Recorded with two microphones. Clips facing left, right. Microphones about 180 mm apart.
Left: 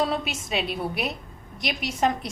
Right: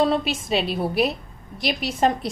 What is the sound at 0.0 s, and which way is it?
A woman's voice, 30° right (ahead or behind).